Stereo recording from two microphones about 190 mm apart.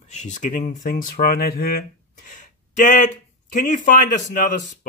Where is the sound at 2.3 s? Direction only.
40° left (ahead or behind).